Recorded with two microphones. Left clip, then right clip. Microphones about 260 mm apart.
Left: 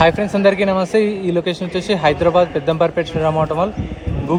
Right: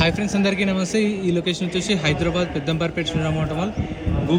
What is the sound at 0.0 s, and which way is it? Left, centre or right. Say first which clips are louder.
Speech: left 8 dB; centre.